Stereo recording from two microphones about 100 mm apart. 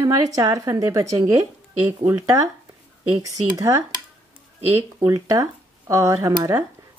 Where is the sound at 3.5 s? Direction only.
35° right (ahead or behind).